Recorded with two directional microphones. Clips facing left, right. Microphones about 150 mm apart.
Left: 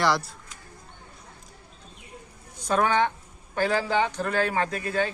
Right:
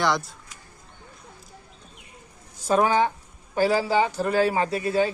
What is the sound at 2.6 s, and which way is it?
A man's voice, 5° right (ahead or behind).